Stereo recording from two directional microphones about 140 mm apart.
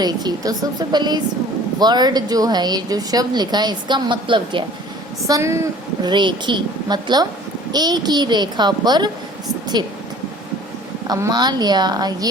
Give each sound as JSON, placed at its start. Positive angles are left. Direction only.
{"t": 0.0, "sound": "a woman's voice", "side_deg": -30}
{"t": 5.2, "sound": "a woman's voice", "side_deg": -20}
{"t": 6.1, "sound": "a woman's voice", "side_deg": -35}
{"t": 11.1, "sound": "a woman's voice", "side_deg": -30}